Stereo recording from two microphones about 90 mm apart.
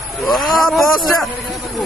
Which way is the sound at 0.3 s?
Centre (ahead or behind).